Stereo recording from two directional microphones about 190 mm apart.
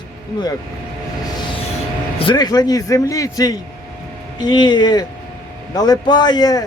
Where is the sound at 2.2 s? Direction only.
25° left (ahead or behind).